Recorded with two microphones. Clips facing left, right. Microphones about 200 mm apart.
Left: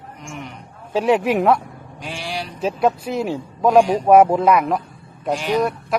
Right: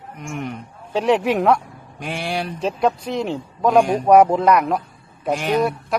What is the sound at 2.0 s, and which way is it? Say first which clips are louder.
Speech: right 4 dB; 55° right (ahead or behind).